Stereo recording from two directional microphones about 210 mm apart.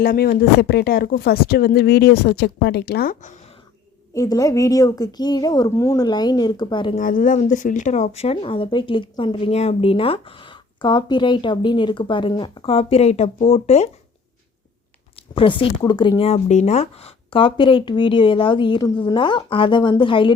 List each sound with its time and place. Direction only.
0.0 s speech: 45° left (ahead or behind)
4.1 s a woman's voice: 15° left (ahead or behind)
6.9 s speech: 40° left (ahead or behind)
15.1 s a sound: 25° left (ahead or behind)
15.8 s speech: 20° left (ahead or behind)